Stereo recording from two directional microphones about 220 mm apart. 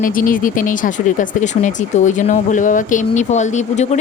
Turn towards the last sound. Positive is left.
turn(degrees=30)  # may be behind; listen again after turning